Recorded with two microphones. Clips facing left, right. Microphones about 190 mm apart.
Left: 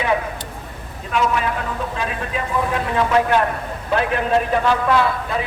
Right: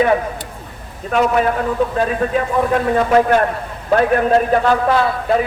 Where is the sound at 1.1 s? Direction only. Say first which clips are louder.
Right 5 dB; 45° right (ahead or behind).